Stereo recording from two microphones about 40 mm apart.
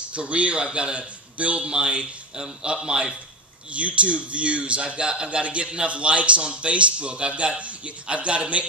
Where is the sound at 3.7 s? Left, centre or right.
Right.